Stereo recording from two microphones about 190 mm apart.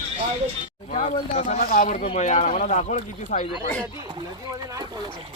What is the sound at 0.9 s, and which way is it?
Speech, 35° left (ahead or behind).